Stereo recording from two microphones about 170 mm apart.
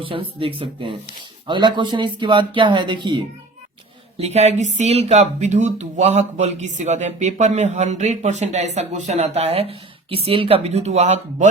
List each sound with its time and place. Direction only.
0.0 s speech: 30° right (ahead or behind)
4.2 s speech: 40° right (ahead or behind)